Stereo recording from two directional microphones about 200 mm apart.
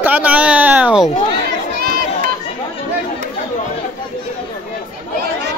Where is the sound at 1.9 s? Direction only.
50° right (ahead or behind).